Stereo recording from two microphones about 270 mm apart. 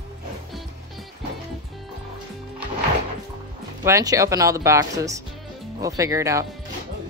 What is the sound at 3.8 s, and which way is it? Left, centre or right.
Speech, centre.